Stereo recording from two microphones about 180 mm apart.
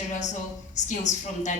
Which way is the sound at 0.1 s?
40° left (ahead or behind).